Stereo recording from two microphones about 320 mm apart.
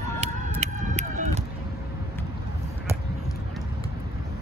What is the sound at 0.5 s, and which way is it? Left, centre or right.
Run, right.